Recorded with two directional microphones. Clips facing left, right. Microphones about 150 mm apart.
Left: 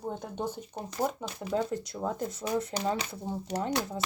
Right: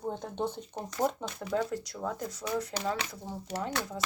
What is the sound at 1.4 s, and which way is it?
Speech, 20° left (ahead or behind).